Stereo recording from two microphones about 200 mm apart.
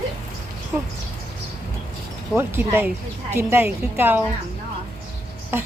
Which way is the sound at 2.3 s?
10° right (ahead or behind).